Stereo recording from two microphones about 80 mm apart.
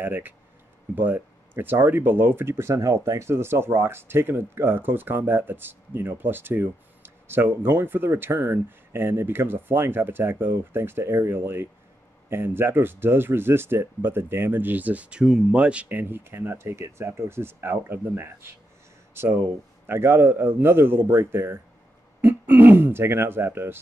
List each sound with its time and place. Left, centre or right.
0.0 s speech: right